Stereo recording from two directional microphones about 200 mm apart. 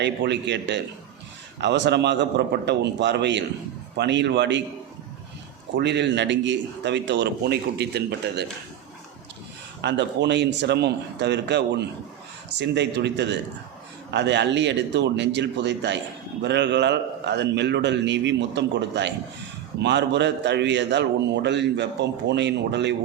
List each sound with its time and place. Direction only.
0.0 s a man's voice: 60° right (ahead or behind)
5.8 s a man's voice: 60° right (ahead or behind)
9.8 s a man's voice: 60° right (ahead or behind)